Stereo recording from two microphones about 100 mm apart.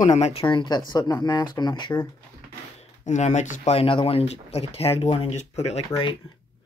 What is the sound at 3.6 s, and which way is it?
Speech, 75° left (ahead or behind).